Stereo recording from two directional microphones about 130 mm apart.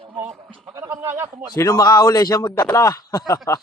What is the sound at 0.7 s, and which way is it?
Speech, 25° right (ahead or behind).